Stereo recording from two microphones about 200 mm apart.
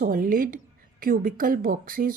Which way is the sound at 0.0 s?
45° right (ahead or behind).